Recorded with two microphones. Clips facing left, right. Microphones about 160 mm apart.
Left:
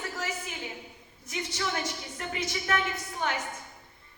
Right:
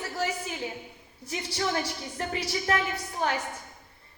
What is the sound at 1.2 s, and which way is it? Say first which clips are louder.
A woman's voice: right 3 dB; 35° right (ahead or behind).